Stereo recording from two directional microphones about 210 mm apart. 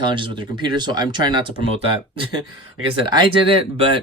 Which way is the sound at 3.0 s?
25° right (ahead or behind).